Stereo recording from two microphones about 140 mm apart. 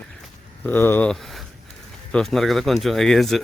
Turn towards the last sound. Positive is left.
turn(degrees=0)  # may be behind; listen again after turning